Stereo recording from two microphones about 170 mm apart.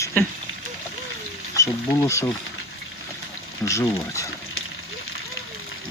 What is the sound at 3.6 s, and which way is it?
Speech, 20° left (ahead or behind).